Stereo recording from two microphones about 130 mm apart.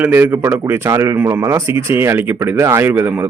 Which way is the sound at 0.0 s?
15° right (ahead or behind).